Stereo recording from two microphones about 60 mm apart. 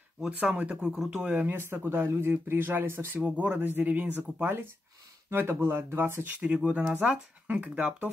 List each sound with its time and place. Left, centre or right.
0.3 s speech: right
0.9 s speech: centre
1.2 s speech: centre
1.5 s speech: right
3.3 s speech: right
6.4 s speech: centre